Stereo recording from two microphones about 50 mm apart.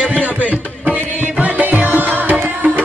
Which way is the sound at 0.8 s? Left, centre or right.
Right.